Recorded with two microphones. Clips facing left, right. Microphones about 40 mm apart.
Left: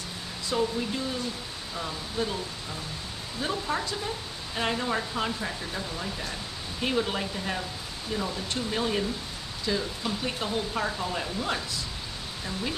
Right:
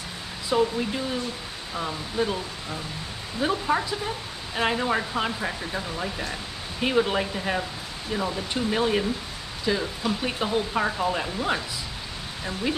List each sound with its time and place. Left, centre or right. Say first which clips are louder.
0.5 s speech: right 4 dB; centre